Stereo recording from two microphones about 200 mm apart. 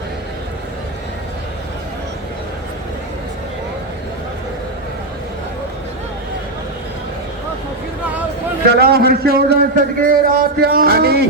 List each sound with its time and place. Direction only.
8.6 s a man's voice: 50° right (ahead or behind)